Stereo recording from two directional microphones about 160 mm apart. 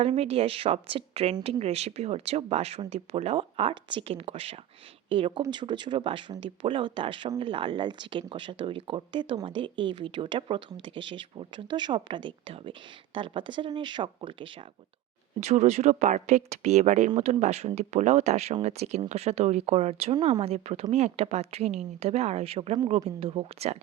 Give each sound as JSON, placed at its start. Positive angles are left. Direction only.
{"t": 0.0, "sound": "speech", "side_deg": -40}
{"t": 15.4, "sound": "speech", "side_deg": -40}
{"t": 20.1, "sound": "speech", "side_deg": -25}
{"t": 20.4, "sound": "speech", "side_deg": -40}